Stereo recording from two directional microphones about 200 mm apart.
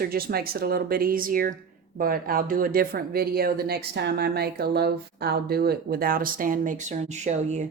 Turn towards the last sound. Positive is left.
turn(degrees=-35)  # may be behind; listen again after turning